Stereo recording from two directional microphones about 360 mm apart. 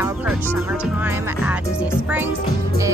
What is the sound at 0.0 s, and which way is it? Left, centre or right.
Speech, centre.